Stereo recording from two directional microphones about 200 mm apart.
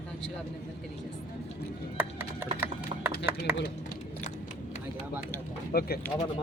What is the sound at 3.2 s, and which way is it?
Speech, 10° right (ahead or behind).